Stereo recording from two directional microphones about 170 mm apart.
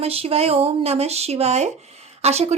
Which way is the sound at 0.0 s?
35° right (ahead or behind).